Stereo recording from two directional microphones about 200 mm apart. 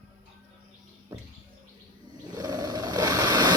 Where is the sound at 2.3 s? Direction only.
20° right (ahead or behind).